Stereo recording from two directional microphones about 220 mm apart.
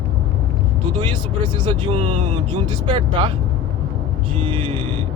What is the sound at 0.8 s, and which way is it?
Speech, 20° right (ahead or behind).